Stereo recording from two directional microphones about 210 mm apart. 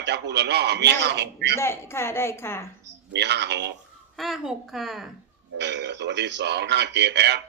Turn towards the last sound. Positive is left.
turn(degrees=-55)  # may be behind; listen again after turning